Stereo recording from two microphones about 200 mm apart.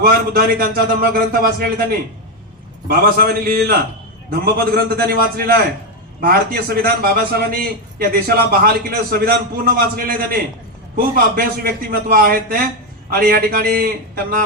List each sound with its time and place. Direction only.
0.0 s a man's voice: 50° right (ahead or behind)